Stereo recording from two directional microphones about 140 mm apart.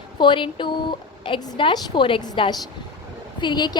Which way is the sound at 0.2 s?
35° left (ahead or behind).